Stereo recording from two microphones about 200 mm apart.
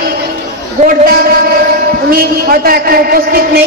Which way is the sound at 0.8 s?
45° right (ahead or behind).